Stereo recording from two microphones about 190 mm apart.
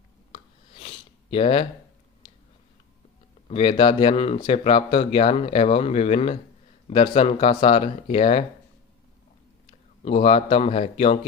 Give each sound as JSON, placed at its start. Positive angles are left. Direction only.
{"t": 0.3, "sound": "a sound", "side_deg": 30}
{"t": 3.5, "sound": "speech", "side_deg": 25}
{"t": 10.0, "sound": "a man's voice", "side_deg": 30}